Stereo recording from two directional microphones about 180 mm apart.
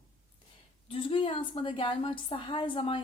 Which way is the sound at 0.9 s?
30° left (ahead or behind).